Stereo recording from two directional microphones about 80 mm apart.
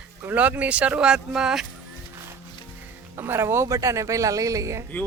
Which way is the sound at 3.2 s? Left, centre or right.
Right.